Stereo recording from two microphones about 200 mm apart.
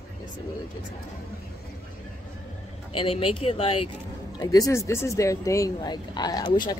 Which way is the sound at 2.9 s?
25° left (ahead or behind).